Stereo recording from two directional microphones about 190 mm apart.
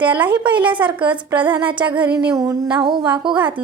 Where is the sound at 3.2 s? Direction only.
25° right (ahead or behind).